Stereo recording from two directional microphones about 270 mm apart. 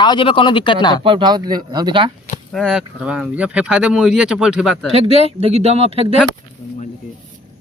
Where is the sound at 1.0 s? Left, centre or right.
Centre.